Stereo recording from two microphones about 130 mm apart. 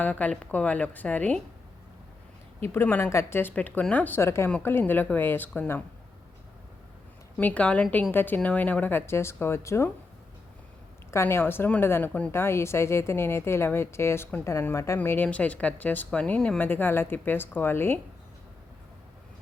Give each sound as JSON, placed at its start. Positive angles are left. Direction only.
{"t": 0.0, "sound": "speech", "side_deg": 10}
{"t": 2.7, "sound": "speech", "side_deg": 15}
{"t": 7.3, "sound": "speech", "side_deg": 10}
{"t": 11.1, "sound": "speech", "side_deg": 20}